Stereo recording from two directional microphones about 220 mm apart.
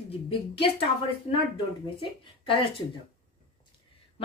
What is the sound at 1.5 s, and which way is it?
Speech, 25° left (ahead or behind).